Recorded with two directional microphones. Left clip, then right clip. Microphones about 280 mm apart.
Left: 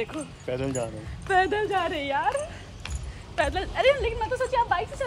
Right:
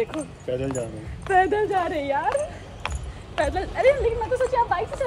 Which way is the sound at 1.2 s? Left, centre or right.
Centre.